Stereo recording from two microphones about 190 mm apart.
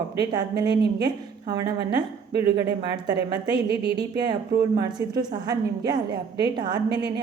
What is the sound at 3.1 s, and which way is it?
Speech, 65° right (ahead or behind).